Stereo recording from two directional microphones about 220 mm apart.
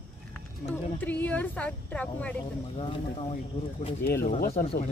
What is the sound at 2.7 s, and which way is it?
Speech, 25° left (ahead or behind).